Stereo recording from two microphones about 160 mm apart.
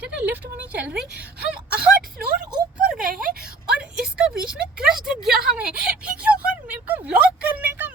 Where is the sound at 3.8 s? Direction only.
5° right (ahead or behind).